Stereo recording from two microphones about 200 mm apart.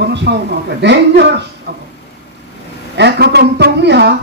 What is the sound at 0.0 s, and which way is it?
Speech, 60° right (ahead or behind).